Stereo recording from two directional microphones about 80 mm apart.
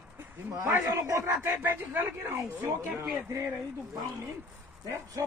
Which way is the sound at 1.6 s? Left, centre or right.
Right.